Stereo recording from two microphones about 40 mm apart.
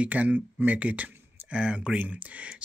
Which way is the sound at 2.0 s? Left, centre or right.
Right.